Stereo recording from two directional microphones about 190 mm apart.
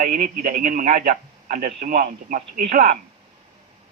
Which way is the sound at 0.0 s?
40° right (ahead or behind).